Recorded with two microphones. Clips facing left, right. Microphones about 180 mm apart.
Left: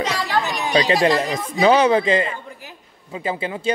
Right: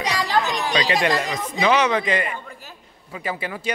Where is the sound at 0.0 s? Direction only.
15° right (ahead or behind).